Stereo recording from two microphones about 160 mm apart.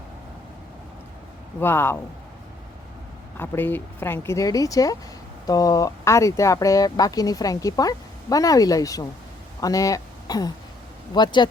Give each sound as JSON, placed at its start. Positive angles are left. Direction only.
{"t": 1.5, "sound": "speech", "side_deg": 15}
{"t": 3.3, "sound": "speech", "side_deg": 15}